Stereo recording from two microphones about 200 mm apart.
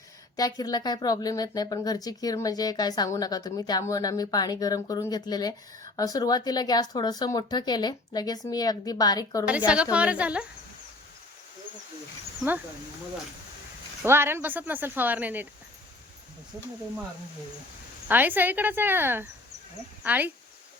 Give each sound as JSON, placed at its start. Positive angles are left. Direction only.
{"t": 0.3, "sound": "speech", "side_deg": 20}
{"t": 9.5, "sound": "speech", "side_deg": -5}
{"t": 14.0, "sound": "speech", "side_deg": -10}
{"t": 18.1, "sound": "speech", "side_deg": -10}